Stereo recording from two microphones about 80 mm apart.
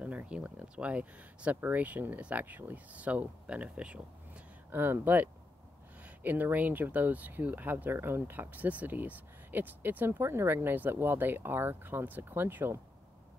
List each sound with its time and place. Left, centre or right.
0.0 s speech: centre
4.6 s speech: right